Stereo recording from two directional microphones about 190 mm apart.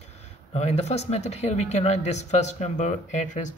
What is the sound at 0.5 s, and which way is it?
Speech, 35° left (ahead or behind).